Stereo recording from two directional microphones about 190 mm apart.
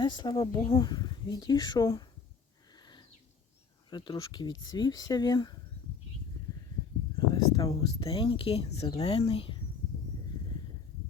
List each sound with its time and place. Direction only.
0.0 s speech: 20° left (ahead or behind)
2.7 s a sound: 20° left (ahead or behind)
3.8 s speech: 25° left (ahead or behind)
7.2 s speech: 20° left (ahead or behind)